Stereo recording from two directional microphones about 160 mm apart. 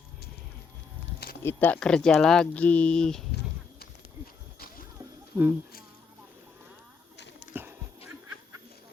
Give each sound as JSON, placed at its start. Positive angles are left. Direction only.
{"t": 1.5, "sound": "speech", "side_deg": 10}
{"t": 5.3, "sound": "speech", "side_deg": -15}
{"t": 7.5, "sound": "dog", "side_deg": -15}